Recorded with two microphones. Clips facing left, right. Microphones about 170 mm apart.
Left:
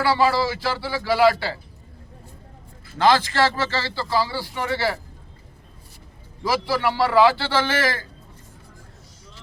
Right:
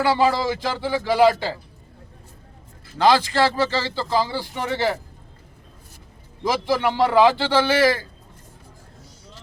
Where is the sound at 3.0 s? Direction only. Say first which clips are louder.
Right 1 dB; 15° right (ahead or behind).